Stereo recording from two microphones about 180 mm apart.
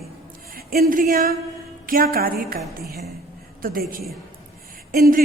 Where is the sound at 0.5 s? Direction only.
55° right (ahead or behind).